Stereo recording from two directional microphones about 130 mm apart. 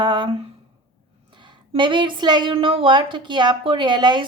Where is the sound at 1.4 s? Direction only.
40° right (ahead or behind).